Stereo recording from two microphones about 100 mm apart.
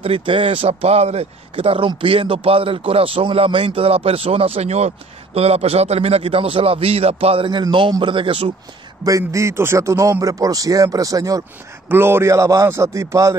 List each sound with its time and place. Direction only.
0.0 s speech: 65° right (ahead or behind); by 7.4 s 85° right
8.0 s speech: 55° right (ahead or behind)
9.0 s speech: 35° right (ahead or behind)
11.9 s speech: 25° right (ahead or behind)